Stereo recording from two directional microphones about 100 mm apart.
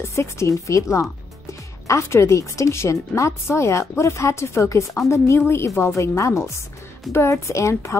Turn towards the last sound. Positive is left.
turn(degrees=30)  # may be behind; listen again after turning